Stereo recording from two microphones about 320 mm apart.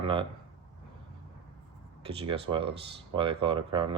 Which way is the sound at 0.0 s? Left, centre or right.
Centre.